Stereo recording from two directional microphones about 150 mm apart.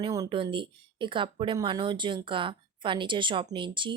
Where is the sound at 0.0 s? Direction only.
30° right (ahead or behind).